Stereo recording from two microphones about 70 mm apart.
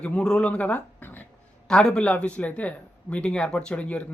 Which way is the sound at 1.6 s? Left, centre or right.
Centre.